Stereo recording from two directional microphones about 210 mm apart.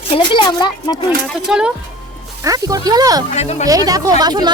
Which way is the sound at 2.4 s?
15° right (ahead or behind).